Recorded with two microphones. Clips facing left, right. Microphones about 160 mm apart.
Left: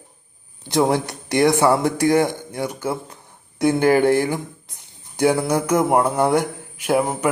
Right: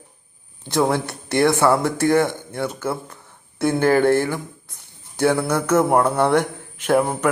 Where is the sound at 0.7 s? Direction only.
15° left (ahead or behind).